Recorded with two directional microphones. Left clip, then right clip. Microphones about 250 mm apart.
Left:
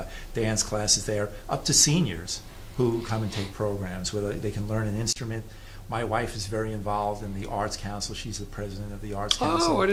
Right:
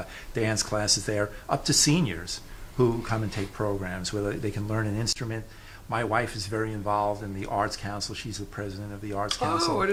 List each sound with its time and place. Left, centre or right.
0.3 s speech: right
9.3 s speech: centre